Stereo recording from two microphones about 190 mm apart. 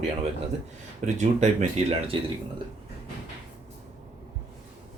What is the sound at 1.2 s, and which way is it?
Speech, 35° right (ahead or behind).